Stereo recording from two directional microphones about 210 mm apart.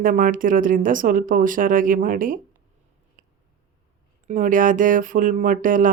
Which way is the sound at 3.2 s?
40° right (ahead or behind).